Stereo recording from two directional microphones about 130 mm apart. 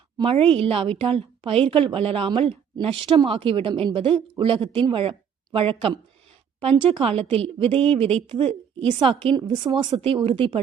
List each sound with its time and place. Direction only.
0.2 s a woman's voice: 45° right (ahead or behind)